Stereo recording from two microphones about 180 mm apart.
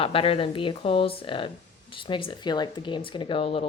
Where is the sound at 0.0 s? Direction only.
30° left (ahead or behind).